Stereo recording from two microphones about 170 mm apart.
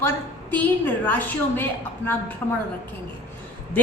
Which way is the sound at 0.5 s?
10° left (ahead or behind).